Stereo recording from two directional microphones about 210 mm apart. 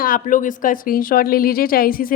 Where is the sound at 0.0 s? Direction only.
40° left (ahead or behind).